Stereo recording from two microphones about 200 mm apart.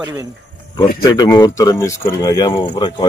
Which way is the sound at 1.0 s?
20° left (ahead or behind).